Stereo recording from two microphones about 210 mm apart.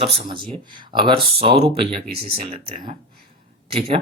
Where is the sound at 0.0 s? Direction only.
25° right (ahead or behind).